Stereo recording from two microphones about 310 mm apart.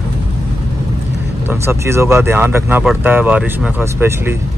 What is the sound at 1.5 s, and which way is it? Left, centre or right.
Speech, centre.